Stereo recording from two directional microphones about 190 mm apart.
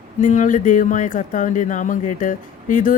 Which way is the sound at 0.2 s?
40° left (ahead or behind).